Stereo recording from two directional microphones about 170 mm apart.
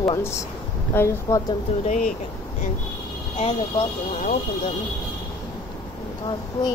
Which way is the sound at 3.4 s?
35° left (ahead or behind).